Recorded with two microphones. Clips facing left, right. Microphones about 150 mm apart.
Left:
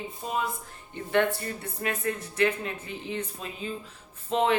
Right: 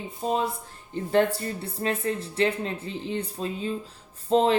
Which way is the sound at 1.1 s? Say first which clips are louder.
Right 2 dB; 30° right (ahead or behind).